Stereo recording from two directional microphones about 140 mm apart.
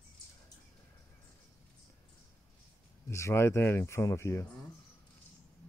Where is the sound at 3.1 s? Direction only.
20° left (ahead or behind).